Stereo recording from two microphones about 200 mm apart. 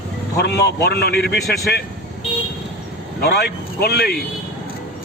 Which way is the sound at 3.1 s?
50° left (ahead or behind).